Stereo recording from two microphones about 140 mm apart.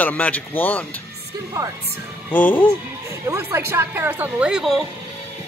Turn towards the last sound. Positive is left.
turn(degrees=0)  # may be behind; listen again after turning